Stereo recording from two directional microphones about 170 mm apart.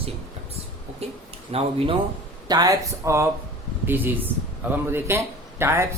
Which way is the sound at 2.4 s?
20° right (ahead or behind).